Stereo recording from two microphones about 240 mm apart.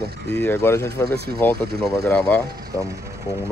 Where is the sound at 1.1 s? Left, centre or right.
Right.